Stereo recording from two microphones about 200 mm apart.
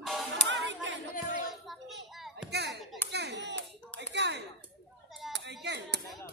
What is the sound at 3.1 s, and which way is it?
Clapping, 60° right (ahead or behind).